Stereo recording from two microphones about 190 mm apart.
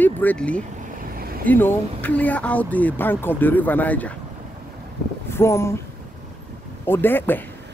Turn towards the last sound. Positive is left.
turn(degrees=10)  # may be behind; listen again after turning